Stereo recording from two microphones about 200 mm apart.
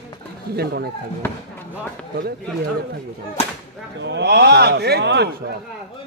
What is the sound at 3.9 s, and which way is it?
Speech, 60° right (ahead or behind).